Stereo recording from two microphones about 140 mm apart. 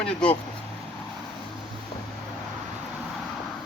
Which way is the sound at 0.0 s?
10° left (ahead or behind).